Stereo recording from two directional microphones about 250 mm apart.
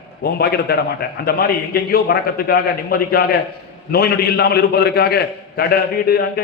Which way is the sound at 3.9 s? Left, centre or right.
Left.